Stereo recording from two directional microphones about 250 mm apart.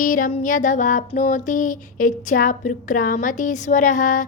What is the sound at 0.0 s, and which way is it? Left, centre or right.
Music, left.